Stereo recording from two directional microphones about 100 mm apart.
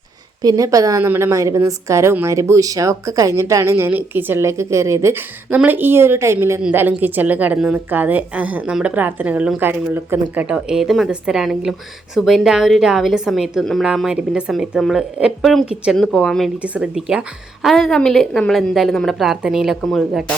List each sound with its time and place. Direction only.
0.4 s a woman's voice: 35° right (ahead or behind); by 10.4 s 20° right (ahead or behind)
10.5 s a woman's voice: 5° right (ahead or behind)